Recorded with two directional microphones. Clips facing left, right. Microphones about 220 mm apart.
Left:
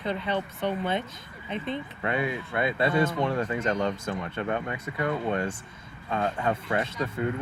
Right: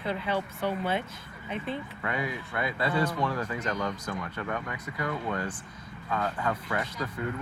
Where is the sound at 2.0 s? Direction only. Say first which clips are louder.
Left 5 dB; 25° left (ahead or behind).